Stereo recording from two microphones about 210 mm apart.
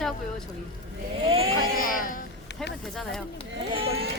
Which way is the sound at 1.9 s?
40° left (ahead or behind).